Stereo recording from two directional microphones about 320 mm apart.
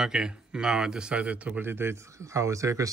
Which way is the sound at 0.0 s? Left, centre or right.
Centre.